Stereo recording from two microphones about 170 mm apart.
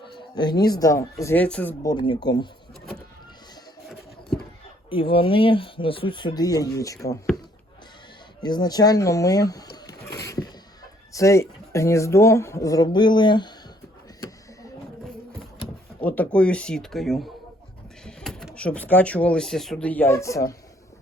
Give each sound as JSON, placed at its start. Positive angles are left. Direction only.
{"t": 0.2, "sound": "speech", "side_deg": 25}
{"t": 1.8, "sound": "speech", "side_deg": 25}
{"t": 4.9, "sound": "speech", "side_deg": 30}
{"t": 8.4, "sound": "speech", "side_deg": 25}
{"t": 9.7, "sound": "a sound", "side_deg": 20}
{"t": 11.1, "sound": "speech", "side_deg": 20}
{"t": 14.2, "sound": "printer", "side_deg": 20}
{"t": 16.0, "sound": "speech", "side_deg": 10}